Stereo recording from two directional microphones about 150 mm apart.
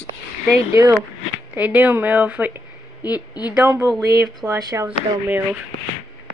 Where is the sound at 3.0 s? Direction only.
25° left (ahead or behind).